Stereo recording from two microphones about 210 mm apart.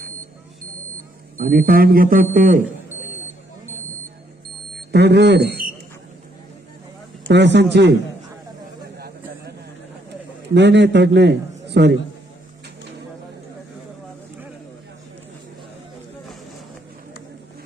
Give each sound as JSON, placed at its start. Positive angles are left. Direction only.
{"t": 1.4, "sound": "speech", "side_deg": -40}
{"t": 4.8, "sound": "speech", "side_deg": -55}
{"t": 7.3, "sound": "a man's voice", "side_deg": -55}
{"t": 10.5, "sound": "a man's voice", "side_deg": -55}